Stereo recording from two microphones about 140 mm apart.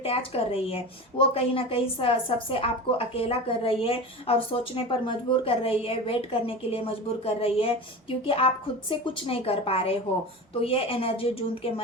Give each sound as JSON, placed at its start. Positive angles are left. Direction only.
{"t": 0.0, "sound": "a woman's voice", "side_deg": 45}